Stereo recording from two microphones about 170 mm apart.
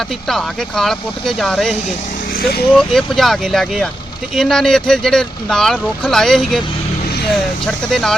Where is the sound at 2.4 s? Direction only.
65° left (ahead or behind).